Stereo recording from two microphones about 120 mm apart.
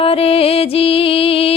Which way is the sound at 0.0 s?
50° left (ahead or behind).